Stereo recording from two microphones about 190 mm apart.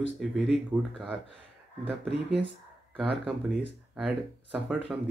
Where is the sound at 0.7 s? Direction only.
5° right (ahead or behind).